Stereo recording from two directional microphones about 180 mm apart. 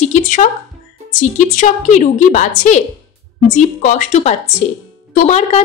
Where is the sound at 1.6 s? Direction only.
45° left (ahead or behind).